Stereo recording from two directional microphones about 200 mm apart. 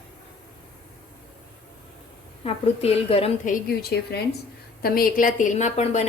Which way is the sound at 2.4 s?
30° left (ahead or behind).